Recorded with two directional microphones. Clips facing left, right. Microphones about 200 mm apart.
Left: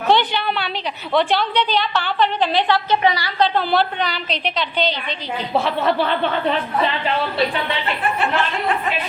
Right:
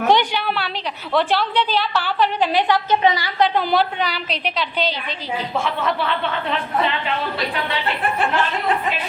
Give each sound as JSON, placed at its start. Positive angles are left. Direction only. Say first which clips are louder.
{"t": 0.1, "sound": "a sound", "louder": "left 2 dB", "side_deg": -10}
{"t": 1.1, "sound": "a woman's voice", "louder": "left 1 dB", "side_deg": 0}
{"t": 5.5, "sound": "speech", "louder": "left 5 dB", "side_deg": 35}